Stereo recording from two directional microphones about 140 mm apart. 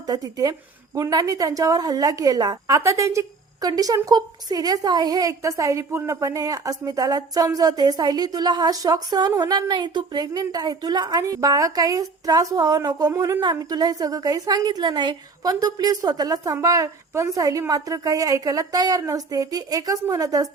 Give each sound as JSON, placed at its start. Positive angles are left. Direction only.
{"t": 0.1, "sound": "a woman's voice", "side_deg": -25}